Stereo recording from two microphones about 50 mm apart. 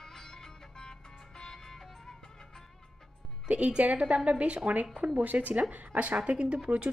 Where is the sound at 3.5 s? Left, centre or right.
Right.